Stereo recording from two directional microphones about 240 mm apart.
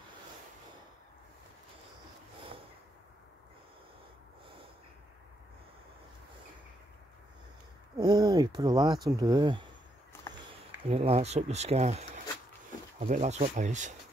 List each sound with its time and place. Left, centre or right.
8.0 s speech: centre
10.9 s speech: right
13.0 s speech: right